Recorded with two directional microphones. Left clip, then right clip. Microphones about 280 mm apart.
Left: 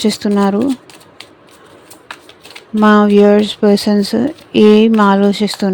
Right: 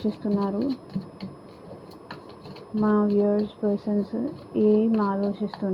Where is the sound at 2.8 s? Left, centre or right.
Left.